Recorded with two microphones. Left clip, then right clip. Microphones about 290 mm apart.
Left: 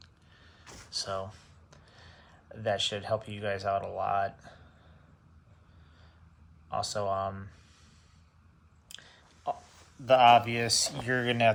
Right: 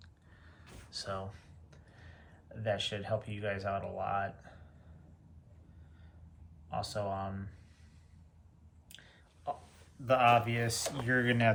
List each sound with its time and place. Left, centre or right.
0.0 s a sound: centre
0.9 s speech: centre
6.7 s speech: left
8.9 s chewing: left
10.1 s speech: centre